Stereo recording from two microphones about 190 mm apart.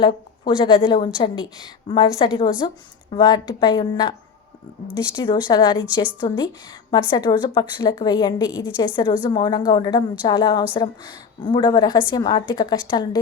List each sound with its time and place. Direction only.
0.0 s a woman's voice: 25° left (ahead or behind)
5.1 s a woman's voice: 25° left (ahead or behind)